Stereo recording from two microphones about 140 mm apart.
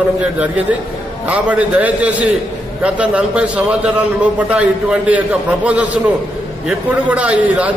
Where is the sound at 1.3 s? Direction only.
10° right (ahead or behind).